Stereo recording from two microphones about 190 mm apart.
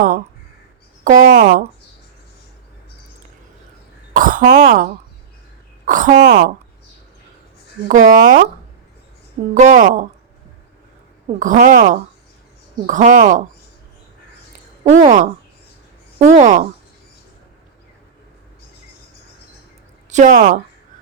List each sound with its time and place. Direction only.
1.0 s speech: 45° right (ahead or behind)
4.1 s speech: 45° right (ahead or behind)
7.9 s speech: 45° right (ahead or behind)
9.6 s speech: 40° right (ahead or behind)
11.3 s speech: 45° right (ahead or behind)
15.0 s speech: 40° right (ahead or behind)
20.1 s speech: 40° right (ahead or behind)